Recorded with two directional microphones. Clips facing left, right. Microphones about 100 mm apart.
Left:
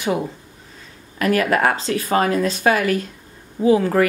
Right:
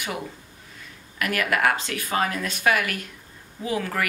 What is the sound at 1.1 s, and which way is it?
Speech, 30° left (ahead or behind).